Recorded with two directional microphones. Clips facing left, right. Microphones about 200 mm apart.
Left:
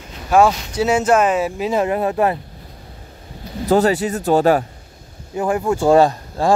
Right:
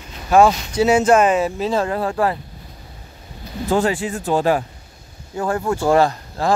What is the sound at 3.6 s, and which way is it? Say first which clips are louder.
Speech: left 4 dB; 40° left (ahead or behind).